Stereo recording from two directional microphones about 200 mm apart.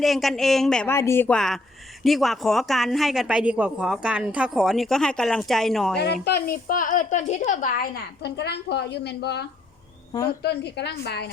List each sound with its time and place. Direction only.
0.0 s speech: centre (ahead or behind)
6.2 s a woman's voice: 50° left (ahead or behind)